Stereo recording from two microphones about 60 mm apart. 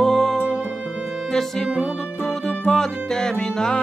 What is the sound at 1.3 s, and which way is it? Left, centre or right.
Music, centre.